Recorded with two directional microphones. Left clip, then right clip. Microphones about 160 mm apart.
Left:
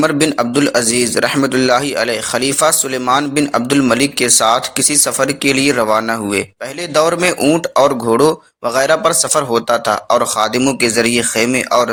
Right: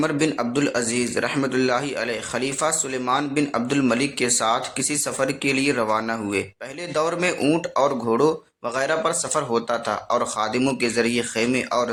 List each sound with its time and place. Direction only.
0.0 s a man's voice: 35° left (ahead or behind)